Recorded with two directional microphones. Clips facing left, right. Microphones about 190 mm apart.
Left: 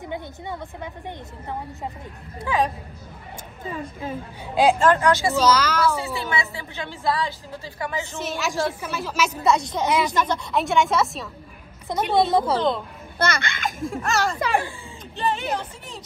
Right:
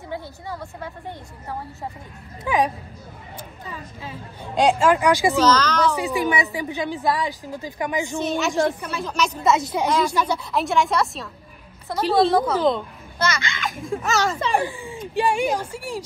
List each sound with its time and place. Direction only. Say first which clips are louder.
0.0 s a woman's voice: left 1 dB; 20° left (ahead or behind)
2.4 s a woman's voice: right 2 dB; 15° right (ahead or behind)
4.6 s a woman's voice: even; centre (ahead or behind)
4.8 s a woman's voice: right 1 dB; 10° right (ahead or behind)
5.4 s a woman's voice: right 1 dB; 10° left (ahead or behind)
5.9 s a woman's voice: right 3 dB; 15° right (ahead or behind)
8.2 s a woman's voice: right 4 dB; centre (ahead or behind)
11.9 s a woman's voice: left 1 dB; 20° left (ahead or behind)
12.5 s a woman's voice: right 3 dB; centre (ahead or behind)
13.2 s a child's voice: even; 55° left (ahead or behind)
13.7 s a woman's voice: right 2 dB; centre (ahead or behind)
14.6 s speech: right 6 dB; 15° right (ahead or behind)